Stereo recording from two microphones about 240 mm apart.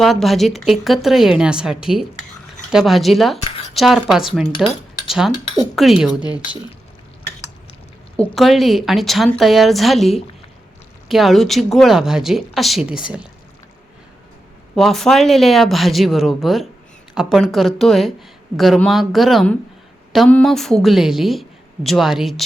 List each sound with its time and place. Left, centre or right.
0.0 s a woman's voice: centre
4.5 s speech: left
5.7 s a woman's voice: centre
8.1 s a woman's voice: centre
14.8 s a woman's voice: centre